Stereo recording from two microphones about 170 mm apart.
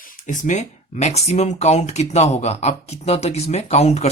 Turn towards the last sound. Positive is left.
turn(degrees=40)  # may be behind; listen again after turning